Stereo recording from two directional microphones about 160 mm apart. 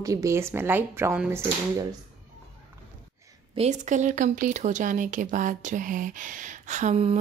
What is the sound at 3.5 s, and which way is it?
Speech, 45° right (ahead or behind).